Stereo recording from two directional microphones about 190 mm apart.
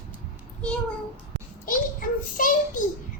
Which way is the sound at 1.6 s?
45° left (ahead or behind).